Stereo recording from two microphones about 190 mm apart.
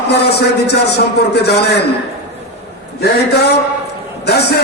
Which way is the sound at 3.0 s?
60° left (ahead or behind).